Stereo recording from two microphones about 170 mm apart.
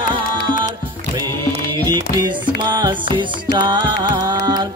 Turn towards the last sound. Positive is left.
turn(degrees=-25)  # may be behind; listen again after turning